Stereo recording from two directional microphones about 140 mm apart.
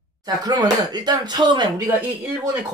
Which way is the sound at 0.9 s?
30° right (ahead or behind).